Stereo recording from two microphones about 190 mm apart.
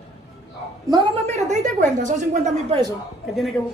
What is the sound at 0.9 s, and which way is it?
A woman's voice, 30° right (ahead or behind).